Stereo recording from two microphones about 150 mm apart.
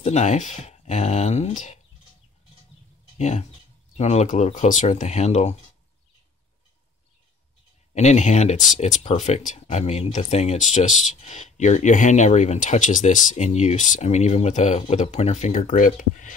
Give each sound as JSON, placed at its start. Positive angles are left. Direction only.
{"t": 0.0, "sound": "speech", "side_deg": 50}
{"t": 3.2, "sound": "speech", "side_deg": 50}
{"t": 7.9, "sound": "speech", "side_deg": 50}